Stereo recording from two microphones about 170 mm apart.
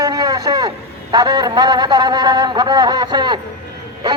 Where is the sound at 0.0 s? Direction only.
20° right (ahead or behind).